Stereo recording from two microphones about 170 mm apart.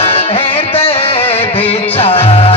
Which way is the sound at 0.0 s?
35° left (ahead or behind).